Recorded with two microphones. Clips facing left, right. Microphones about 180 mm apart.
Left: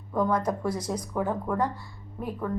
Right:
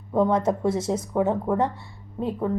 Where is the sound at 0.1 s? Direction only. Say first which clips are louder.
Right 5 dB; 25° right (ahead or behind).